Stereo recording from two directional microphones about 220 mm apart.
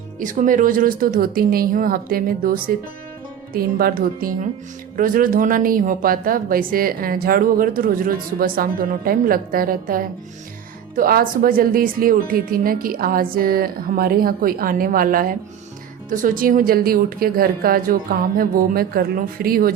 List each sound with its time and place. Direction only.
0.2 s a woman's voice: 35° right (ahead or behind)